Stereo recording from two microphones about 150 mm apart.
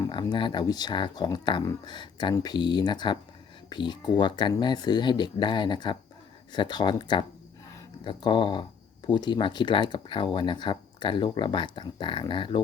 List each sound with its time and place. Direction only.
0.1 s speech: 30° left (ahead or behind)